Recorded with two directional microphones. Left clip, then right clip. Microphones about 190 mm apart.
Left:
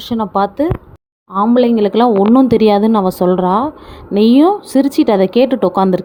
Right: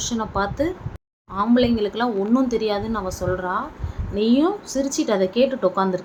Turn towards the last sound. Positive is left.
turn(degrees=55)  # may be behind; listen again after turning